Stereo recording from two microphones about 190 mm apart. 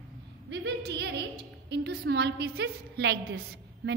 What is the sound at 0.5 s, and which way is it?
A woman's voice, 65° right (ahead or behind).